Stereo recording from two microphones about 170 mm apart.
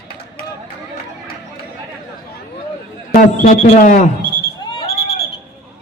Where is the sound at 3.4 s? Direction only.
50° left (ahead or behind).